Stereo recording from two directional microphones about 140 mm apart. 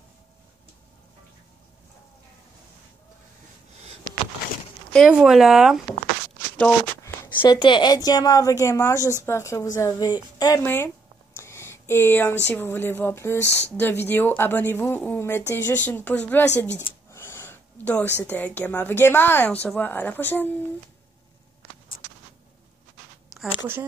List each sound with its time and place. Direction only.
4.9 s speech: 5° right (ahead or behind)
7.3 s a woman's voice: 35° left (ahead or behind)
10.6 s speech: 15° left (ahead or behind)
11.3 s a sound: 20° left (ahead or behind)
12.4 s speech: 15° left (ahead or behind)
17.1 s gasp: 15° left (ahead or behind)
18.2 s speech: 15° left (ahead or behind)
21.9 s a sound: 65° left (ahead or behind)
23.3 s a sound: 5° right (ahead or behind)